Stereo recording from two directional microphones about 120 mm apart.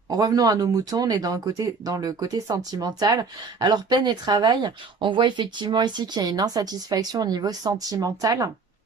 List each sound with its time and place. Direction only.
0.1 s speech: 30° right (ahead or behind)